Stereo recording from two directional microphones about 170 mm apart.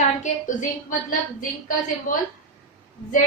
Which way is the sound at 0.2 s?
45° left (ahead or behind).